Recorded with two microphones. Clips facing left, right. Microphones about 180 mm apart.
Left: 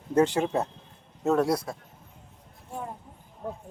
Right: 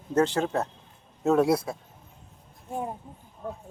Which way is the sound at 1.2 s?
5° right (ahead or behind).